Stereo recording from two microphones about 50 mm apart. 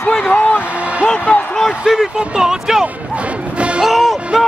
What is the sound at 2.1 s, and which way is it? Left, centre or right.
Speech, centre.